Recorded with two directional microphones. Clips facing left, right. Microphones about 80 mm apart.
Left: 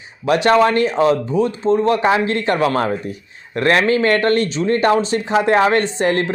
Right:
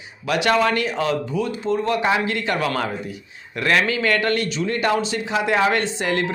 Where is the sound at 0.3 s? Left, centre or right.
Left.